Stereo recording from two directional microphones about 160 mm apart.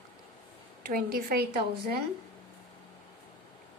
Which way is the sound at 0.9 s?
65° right (ahead or behind).